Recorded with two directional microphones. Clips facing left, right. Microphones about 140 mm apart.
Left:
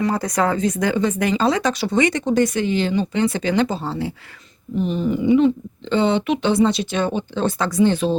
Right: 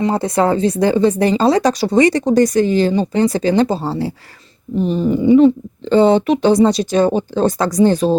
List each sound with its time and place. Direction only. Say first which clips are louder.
0.0 s speech: right 4 dB; 25° right (ahead or behind)